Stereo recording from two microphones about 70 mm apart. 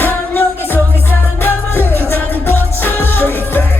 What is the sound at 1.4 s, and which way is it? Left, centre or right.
Music, left.